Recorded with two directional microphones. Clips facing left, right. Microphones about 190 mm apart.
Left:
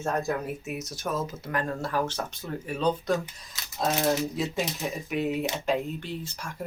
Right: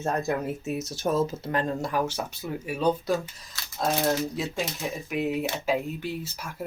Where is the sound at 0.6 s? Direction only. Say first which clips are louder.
Right 5 dB; 25° right (ahead or behind); by 3.2 s 10° right (ahead or behind).